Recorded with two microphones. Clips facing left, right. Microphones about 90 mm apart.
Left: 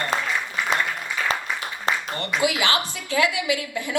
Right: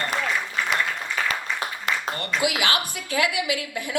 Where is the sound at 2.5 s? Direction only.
25° left (ahead or behind).